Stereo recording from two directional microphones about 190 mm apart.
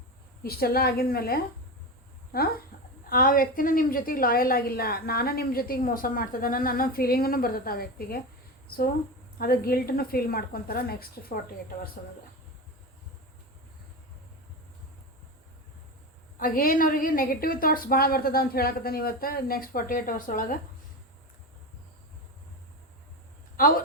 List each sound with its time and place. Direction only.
0.4 s a woman's voice: 55° left (ahead or behind)
9.4 s a woman's voice: 50° left (ahead or behind)
16.4 s a woman's voice: 50° left (ahead or behind)
23.6 s a man's voice: 45° left (ahead or behind)